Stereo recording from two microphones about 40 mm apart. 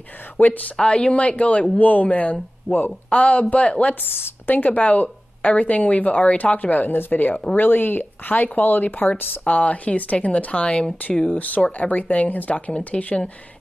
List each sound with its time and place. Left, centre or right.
0.4 s speech: left
0.7 s speech: left
4.5 s speech: left
9.4 s speech: left
11.2 s speech: left
12.7 s speech: left